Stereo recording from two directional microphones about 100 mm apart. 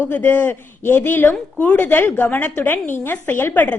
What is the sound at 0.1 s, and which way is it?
A woman's voice, 15° left (ahead or behind).